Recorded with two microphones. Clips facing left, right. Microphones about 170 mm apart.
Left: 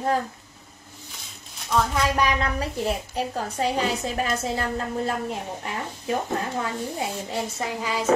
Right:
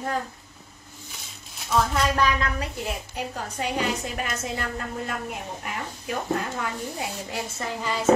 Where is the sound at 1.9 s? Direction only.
15° left (ahead or behind).